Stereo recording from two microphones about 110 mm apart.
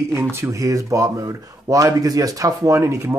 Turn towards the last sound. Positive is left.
turn(degrees=-25)  # may be behind; listen again after turning